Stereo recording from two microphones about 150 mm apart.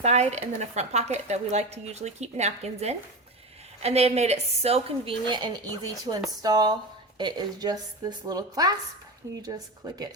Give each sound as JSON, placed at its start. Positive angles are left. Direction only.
{"t": 0.0, "sound": "a woman's voice", "side_deg": -50}